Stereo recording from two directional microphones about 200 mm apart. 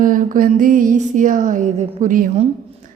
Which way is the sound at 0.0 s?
40° right (ahead or behind).